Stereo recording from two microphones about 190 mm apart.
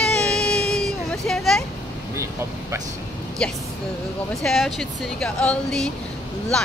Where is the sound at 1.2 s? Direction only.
Centre (ahead or behind).